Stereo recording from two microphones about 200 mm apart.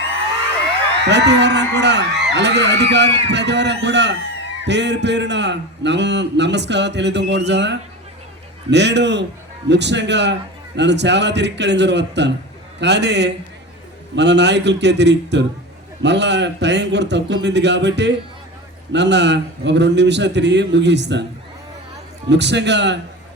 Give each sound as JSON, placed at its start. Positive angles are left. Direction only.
{"t": 1.0, "sound": "a man's voice", "side_deg": -60}
{"t": 22.3, "sound": "a man's voice", "side_deg": -60}